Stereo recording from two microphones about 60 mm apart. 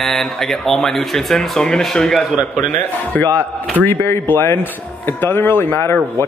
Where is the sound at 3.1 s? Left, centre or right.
Left.